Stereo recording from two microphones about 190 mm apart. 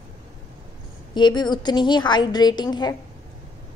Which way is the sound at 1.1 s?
25° left (ahead or behind).